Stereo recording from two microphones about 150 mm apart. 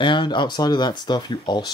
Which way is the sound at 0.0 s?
30° left (ahead or behind).